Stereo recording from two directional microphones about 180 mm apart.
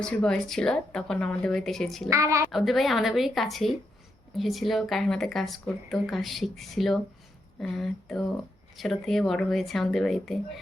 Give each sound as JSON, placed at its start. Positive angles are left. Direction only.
{"t": 0.0, "sound": "speech", "side_deg": 5}
{"t": 2.0, "sound": "a woman's voice", "side_deg": -15}
{"t": 2.5, "sound": "speech", "side_deg": 0}